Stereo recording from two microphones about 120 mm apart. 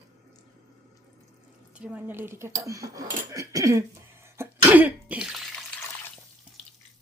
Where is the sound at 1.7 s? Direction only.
10° right (ahead or behind).